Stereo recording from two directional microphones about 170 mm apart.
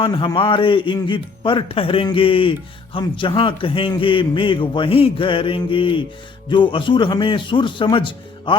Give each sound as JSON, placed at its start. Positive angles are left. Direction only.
{"t": 0.0, "sound": "a man's voice", "side_deg": 30}